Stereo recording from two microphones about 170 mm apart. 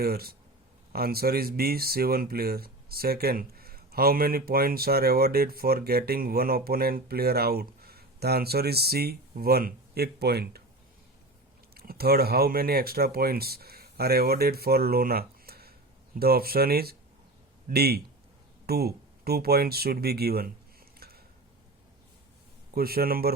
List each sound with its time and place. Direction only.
0.0 s speech: 65° right (ahead or behind)
11.7 s a man's voice: 65° right (ahead or behind)
21.0 s a sound: 65° right (ahead or behind)
22.7 s speech: 65° right (ahead or behind)